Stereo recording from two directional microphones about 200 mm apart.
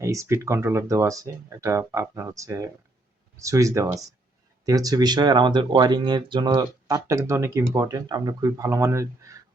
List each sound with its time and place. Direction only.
0.0 s speech: 15° right (ahead or behind)